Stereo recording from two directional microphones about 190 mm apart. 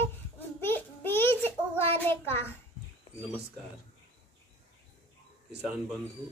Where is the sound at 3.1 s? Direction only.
30° left (ahead or behind).